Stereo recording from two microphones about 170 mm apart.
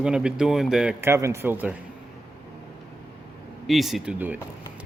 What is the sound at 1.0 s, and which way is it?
Speech, 15° right (ahead or behind).